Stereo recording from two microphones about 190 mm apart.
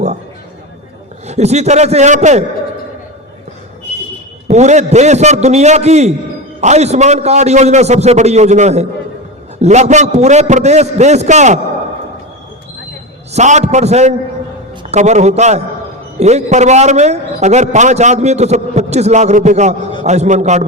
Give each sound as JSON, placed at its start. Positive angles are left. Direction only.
{"t": 1.3, "sound": "a man's voice", "side_deg": -35}
{"t": 4.4, "sound": "a man's voice", "side_deg": -35}
{"t": 13.3, "sound": "a man's voice", "side_deg": -35}